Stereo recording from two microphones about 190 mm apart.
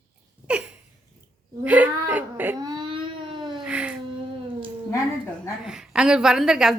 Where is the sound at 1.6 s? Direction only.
5° right (ahead or behind); by 3.6 s 25° right (ahead or behind).